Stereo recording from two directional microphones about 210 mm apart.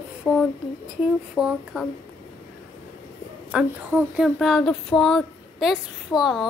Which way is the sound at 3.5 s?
5° right (ahead or behind).